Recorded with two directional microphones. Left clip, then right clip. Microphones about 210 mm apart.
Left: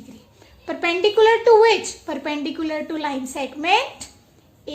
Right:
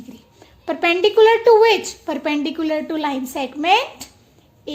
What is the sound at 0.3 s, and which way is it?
A woman's voice, 35° right (ahead or behind).